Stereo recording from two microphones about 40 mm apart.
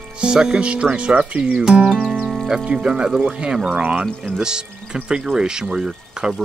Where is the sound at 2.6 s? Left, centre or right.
Right.